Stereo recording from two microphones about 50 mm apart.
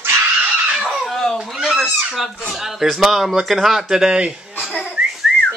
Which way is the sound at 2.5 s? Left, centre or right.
Centre.